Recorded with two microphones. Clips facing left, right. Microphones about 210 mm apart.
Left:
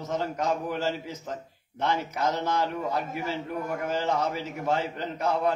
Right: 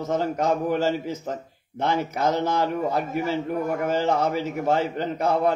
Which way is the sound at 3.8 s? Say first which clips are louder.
Right 4 dB; 50° right (ahead or behind).